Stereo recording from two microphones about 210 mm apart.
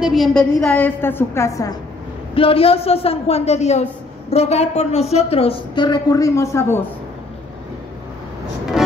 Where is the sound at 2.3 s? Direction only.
25° left (ahead or behind).